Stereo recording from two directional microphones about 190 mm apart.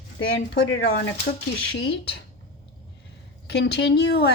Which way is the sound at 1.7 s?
65° left (ahead or behind).